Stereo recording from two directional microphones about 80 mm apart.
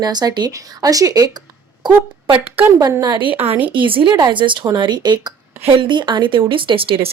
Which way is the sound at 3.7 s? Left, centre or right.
Right.